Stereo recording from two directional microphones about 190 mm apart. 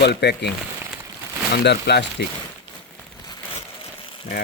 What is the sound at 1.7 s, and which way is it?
Speech, 60° left (ahead or behind).